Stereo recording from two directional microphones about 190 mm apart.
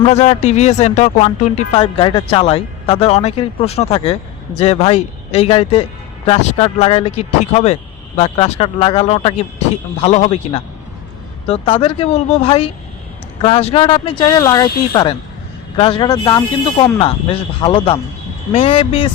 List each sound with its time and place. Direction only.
0.1 s speech: 35° left (ahead or behind)